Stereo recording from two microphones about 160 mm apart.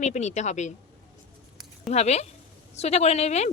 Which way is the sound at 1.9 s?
45° left (ahead or behind).